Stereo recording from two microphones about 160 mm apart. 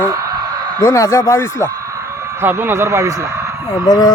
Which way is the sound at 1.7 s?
20° right (ahead or behind).